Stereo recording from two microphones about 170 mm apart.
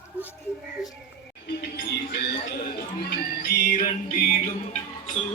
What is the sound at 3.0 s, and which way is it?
Music, 65° left (ahead or behind).